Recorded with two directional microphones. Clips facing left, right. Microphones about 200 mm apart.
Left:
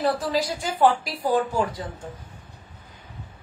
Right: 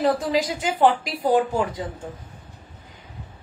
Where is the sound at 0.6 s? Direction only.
20° right (ahead or behind).